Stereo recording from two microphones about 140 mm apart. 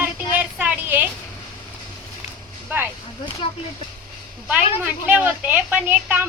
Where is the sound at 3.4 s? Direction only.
40° left (ahead or behind).